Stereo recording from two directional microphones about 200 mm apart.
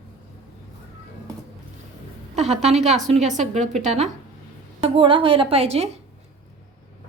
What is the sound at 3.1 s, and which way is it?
A woman's voice, 35° right (ahead or behind).